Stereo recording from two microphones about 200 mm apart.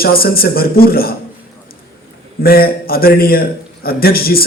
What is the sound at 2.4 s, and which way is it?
A man's voice, 50° left (ahead or behind).